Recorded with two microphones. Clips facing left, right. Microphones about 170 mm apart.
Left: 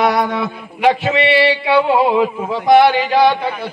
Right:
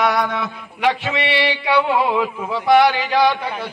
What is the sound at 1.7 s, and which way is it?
Speech, 30° left (ahead or behind).